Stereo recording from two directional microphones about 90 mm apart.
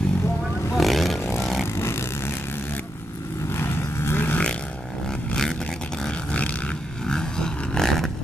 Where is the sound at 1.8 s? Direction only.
30° left (ahead or behind).